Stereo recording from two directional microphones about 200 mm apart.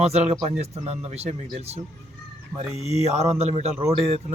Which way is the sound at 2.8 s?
30° left (ahead or behind).